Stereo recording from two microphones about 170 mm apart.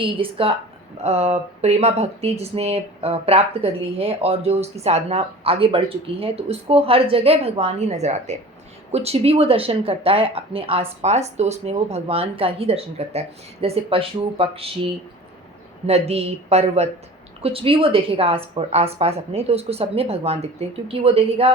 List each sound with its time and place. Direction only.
0.0 s speech: 30° right (ahead or behind)
15.9 s speech: 40° right (ahead or behind)